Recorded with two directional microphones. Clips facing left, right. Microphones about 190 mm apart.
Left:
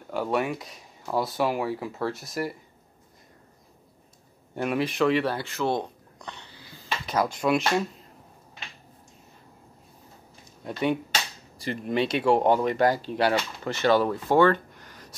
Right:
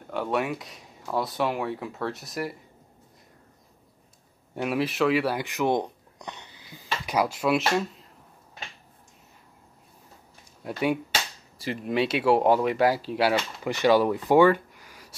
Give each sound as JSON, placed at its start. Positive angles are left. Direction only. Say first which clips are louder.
{"t": 0.1, "sound": "speech", "louder": "left 1 dB", "side_deg": 0}
{"t": 4.6, "sound": "speech", "louder": "even", "side_deg": -5}
{"t": 10.6, "sound": "speech", "louder": "even", "side_deg": -5}